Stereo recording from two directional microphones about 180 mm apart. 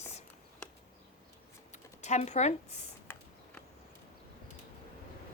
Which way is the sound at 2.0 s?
40° left (ahead or behind).